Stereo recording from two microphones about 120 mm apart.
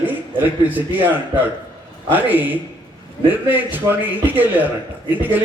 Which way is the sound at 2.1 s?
15° right (ahead or behind).